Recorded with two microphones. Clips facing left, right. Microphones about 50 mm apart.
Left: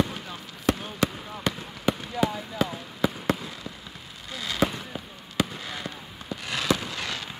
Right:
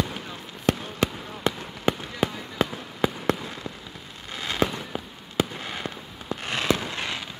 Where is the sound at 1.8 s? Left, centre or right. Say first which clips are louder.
Even; right.